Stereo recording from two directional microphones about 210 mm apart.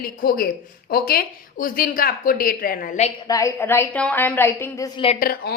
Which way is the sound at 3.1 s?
15° left (ahead or behind).